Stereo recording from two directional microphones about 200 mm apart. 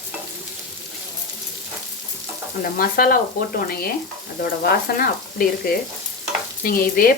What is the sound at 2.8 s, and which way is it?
Frying, 45° left (ahead or behind).